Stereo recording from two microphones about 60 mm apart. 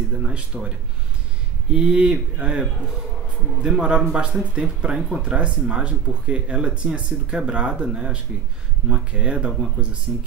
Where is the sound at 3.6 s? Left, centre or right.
Centre.